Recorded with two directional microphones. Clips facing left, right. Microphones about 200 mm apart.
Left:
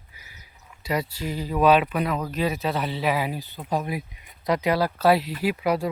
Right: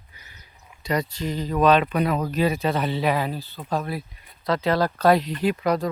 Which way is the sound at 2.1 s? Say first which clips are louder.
Right 3 dB; 40° right (ahead or behind).